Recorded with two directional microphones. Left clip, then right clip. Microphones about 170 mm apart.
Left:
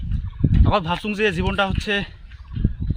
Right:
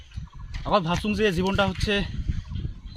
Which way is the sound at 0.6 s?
Centre (ahead or behind).